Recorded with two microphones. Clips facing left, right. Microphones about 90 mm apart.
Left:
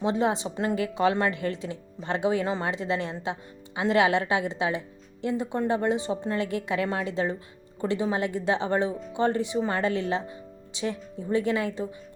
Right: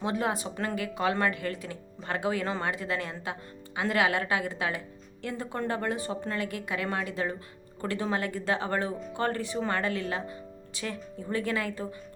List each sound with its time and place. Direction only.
0.0 s a woman's voice: 25° left (ahead or behind)